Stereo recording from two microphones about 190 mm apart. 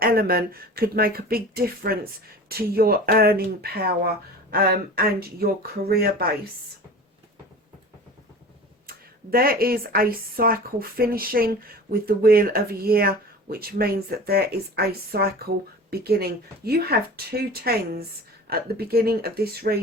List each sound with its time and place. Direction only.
0.0 s speech: 50° right (ahead or behind)
8.9 s speech: 50° right (ahead or behind)